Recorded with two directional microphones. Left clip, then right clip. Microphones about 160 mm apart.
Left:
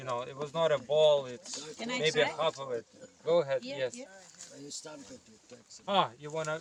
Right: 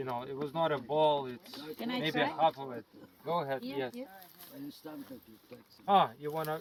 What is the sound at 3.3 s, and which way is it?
Speech, 60° left (ahead or behind).